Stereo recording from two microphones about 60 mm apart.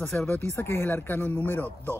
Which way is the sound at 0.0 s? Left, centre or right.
Centre.